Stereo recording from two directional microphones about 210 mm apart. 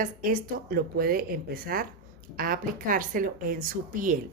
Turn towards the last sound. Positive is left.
turn(degrees=-40)  # may be behind; listen again after turning